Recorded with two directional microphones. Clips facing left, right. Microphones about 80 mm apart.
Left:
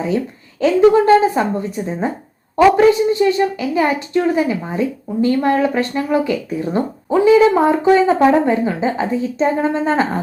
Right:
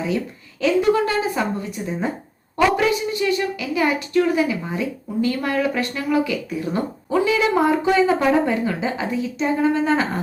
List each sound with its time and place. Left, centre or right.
0.6 s a woman's voice: left